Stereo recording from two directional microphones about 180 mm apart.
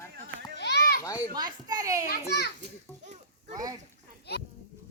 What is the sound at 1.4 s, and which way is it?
Speech, 25° right (ahead or behind).